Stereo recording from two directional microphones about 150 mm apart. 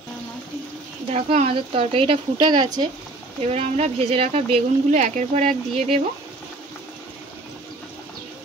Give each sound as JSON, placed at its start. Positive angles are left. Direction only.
{"t": 1.1, "sound": "speech", "side_deg": -45}
{"t": 3.4, "sound": "speech", "side_deg": -45}